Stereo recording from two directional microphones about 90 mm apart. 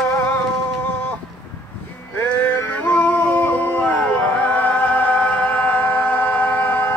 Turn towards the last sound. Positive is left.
turn(degrees=20)  # may be behind; listen again after turning